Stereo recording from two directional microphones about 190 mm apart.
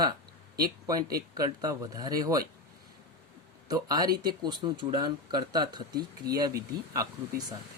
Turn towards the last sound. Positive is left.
turn(degrees=-20)  # may be behind; listen again after turning